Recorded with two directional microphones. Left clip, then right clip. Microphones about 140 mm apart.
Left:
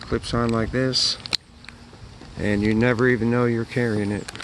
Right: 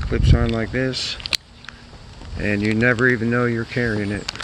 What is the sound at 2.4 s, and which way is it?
Speech, 25° left (ahead or behind).